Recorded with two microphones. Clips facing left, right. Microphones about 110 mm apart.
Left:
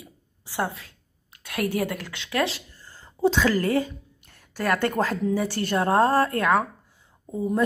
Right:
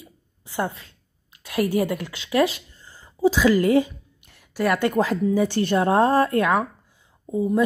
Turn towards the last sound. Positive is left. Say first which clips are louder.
# right 3 dB
turn(degrees=-10)  # may be behind; listen again after turning